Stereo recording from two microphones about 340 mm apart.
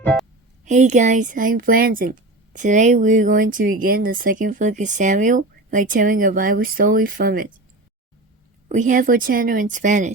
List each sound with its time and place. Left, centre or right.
0.0 s music: centre
0.6 s speech: right
8.7 s speech: right